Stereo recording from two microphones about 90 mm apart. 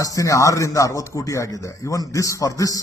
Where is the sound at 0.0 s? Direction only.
40° left (ahead or behind).